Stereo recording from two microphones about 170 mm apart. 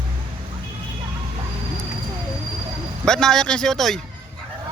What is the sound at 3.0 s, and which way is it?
Speech, 5° left (ahead or behind).